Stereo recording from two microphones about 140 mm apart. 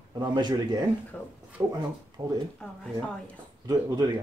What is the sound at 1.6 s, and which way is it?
Speech, 15° right (ahead or behind).